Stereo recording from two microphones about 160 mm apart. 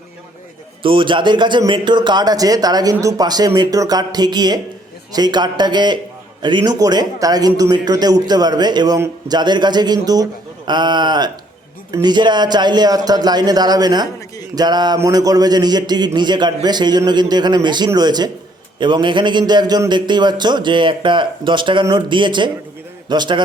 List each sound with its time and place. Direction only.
0.8 s a man's voice: 30° right (ahead or behind)